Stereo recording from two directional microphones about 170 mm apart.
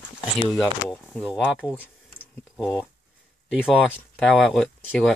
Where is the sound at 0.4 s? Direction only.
5° left (ahead or behind).